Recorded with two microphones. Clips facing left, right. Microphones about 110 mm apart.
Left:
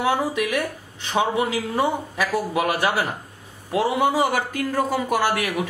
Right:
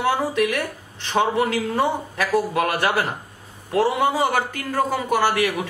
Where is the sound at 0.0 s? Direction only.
15° left (ahead or behind).